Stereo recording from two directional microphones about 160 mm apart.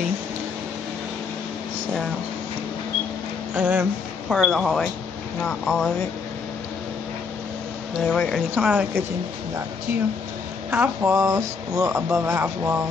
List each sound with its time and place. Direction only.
3.5 s speech: 10° right (ahead or behind)
8.0 s speech: centre (ahead or behind)
10.7 s speech: 15° right (ahead or behind)